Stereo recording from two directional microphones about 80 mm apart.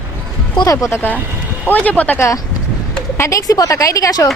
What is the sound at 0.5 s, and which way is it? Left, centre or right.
Speech, left.